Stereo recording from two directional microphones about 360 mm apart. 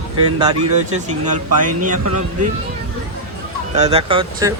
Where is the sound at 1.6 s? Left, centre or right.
Right.